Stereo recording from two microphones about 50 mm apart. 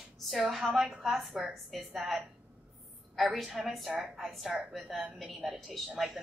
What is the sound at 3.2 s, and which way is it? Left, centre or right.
A woman's voice, centre.